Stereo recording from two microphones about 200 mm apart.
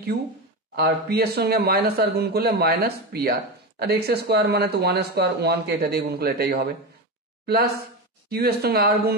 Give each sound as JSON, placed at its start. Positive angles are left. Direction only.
{"t": 0.7, "sound": "speech", "side_deg": -50}
{"t": 8.3, "sound": "speech", "side_deg": -50}